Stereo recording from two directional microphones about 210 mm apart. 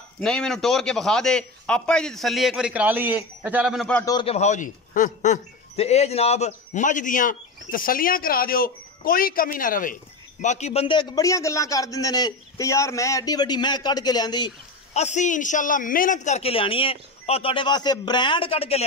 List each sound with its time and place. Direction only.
0.2 s a man's voice: 5° left (ahead or behind)
4.0 s a man's voice: 20° left (ahead or behind)
15.0 s a man's voice: 35° left (ahead or behind)